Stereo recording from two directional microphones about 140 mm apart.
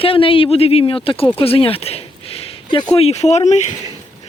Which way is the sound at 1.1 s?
40° left (ahead or behind).